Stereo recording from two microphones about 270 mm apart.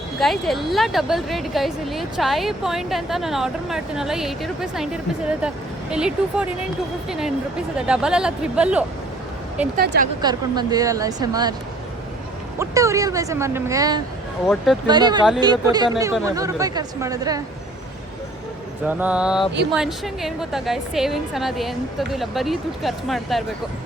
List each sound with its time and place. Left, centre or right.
0.2 s a woman's voice: centre
5.9 s a woman's voice: centre
9.7 s speech: right
10.2 s speech: centre
12.5 s speech: centre
14.4 s a woman's voice: centre
14.8 s speech: centre
18.9 s a woman's voice: centre